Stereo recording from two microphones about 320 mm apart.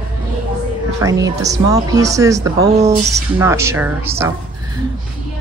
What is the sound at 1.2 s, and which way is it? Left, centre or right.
Speech, centre.